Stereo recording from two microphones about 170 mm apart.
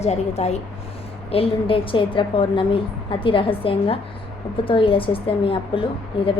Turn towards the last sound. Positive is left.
turn(degrees=30)  # may be behind; listen again after turning